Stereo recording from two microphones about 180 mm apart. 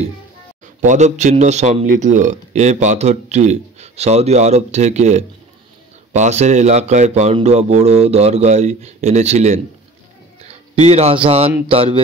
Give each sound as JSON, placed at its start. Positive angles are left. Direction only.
{"t": 0.7, "sound": "speech", "side_deg": -40}
{"t": 10.4, "sound": "a sound", "side_deg": -35}
{"t": 11.2, "sound": "speech", "side_deg": -35}